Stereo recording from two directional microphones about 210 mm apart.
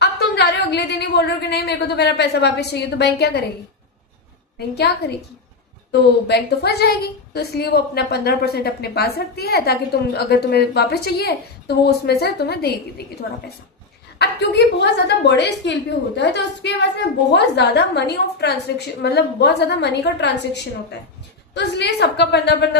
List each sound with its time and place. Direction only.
0.0 s a woman's voice: 50° left (ahead or behind)
4.5 s a woman's voice: 50° left (ahead or behind)
14.2 s a woman's voice: 55° left (ahead or behind)